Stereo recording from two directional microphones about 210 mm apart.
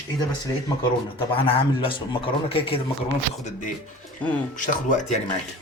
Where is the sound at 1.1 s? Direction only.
25° left (ahead or behind).